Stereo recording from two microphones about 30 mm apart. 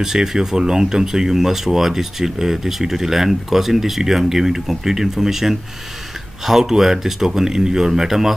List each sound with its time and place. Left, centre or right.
0.0 s speech: centre